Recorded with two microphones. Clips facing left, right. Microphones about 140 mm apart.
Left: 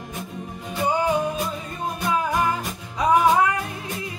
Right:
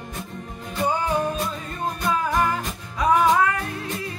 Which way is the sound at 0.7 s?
10° left (ahead or behind).